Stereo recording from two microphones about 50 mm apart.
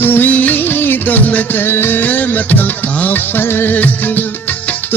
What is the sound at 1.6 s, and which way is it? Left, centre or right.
Music, left.